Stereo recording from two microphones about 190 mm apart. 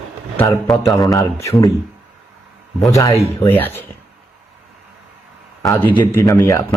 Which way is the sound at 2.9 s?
15° left (ahead or behind).